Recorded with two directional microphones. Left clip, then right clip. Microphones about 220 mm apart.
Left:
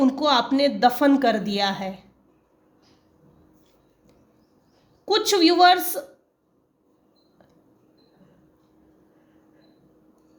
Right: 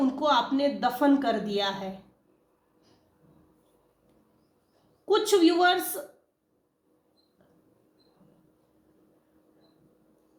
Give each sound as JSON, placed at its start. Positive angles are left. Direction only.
{"t": 0.0, "sound": "speech", "side_deg": 40}
{"t": 5.0, "sound": "speech", "side_deg": 40}